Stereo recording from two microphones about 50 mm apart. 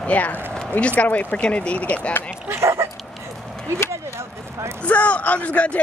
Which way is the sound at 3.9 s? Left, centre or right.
Right.